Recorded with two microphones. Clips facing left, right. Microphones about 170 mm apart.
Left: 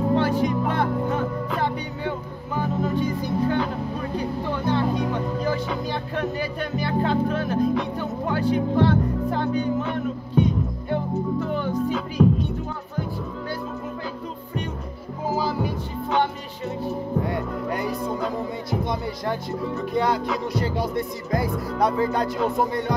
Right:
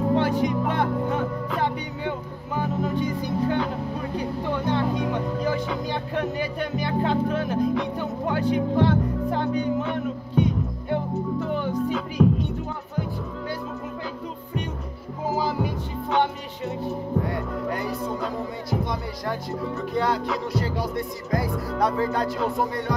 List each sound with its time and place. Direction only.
0.1 s music: 15° right (ahead or behind)
4.6 s speech: 15° right (ahead or behind)
10.3 s music: 15° right (ahead or behind)
12.2 s music: centre (ahead or behind)
15.3 s music: 20° right (ahead or behind)
17.3 s music: 15° left (ahead or behind)
18.7 s speech: 25° left (ahead or behind)
20.5 s music: 20° left (ahead or behind)